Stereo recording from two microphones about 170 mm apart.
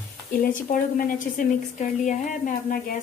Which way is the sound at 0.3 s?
55° left (ahead or behind).